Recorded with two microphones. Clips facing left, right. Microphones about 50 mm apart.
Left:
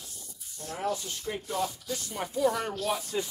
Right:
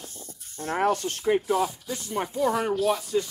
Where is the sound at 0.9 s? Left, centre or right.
Right.